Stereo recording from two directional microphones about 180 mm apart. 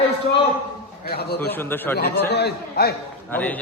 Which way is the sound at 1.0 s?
60° left (ahead or behind).